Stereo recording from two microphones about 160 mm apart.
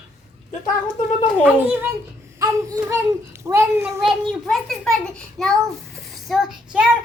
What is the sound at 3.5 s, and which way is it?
Speech, 15° right (ahead or behind).